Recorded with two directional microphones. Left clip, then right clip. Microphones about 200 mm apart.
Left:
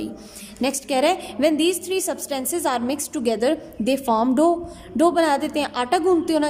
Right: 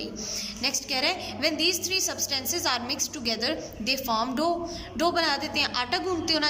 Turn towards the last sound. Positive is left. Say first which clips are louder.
# left 8 dB
turn(degrees=45)  # may be behind; listen again after turning